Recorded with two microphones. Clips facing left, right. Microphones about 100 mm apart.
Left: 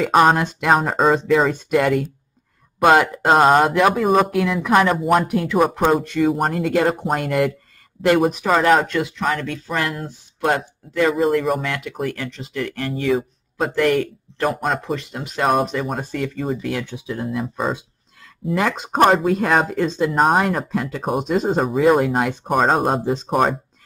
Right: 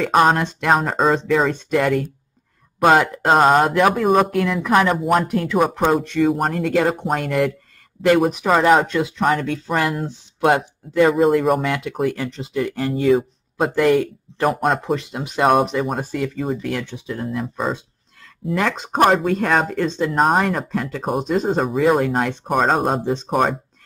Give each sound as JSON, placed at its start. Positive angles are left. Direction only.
{"t": 0.0, "sound": "speech", "side_deg": 0}
{"t": 8.8, "sound": "speech", "side_deg": -20}
{"t": 9.8, "sound": "speech", "side_deg": 0}
{"t": 15.0, "sound": "speech", "side_deg": -15}
{"t": 15.4, "sound": "speech", "side_deg": 0}